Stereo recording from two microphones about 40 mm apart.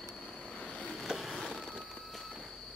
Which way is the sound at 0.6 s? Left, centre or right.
Left.